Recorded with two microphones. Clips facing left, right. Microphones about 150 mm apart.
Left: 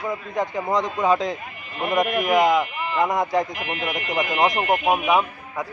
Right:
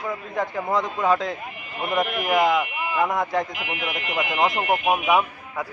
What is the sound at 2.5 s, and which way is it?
Speech, 5° right (ahead or behind).